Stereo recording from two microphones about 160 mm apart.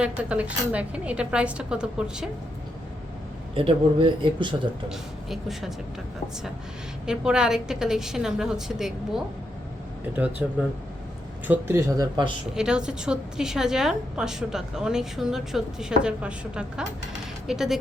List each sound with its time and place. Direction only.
0.0 s a woman's voice: 10° right (ahead or behind)
3.5 s speech: 35° right (ahead or behind)
4.9 s a woman's voice: centre (ahead or behind)
7.1 s a woman's voice: 5° right (ahead or behind)
10.4 s a woman's voice: 10° right (ahead or behind)
12.5 s a woman's voice: 5° right (ahead or behind)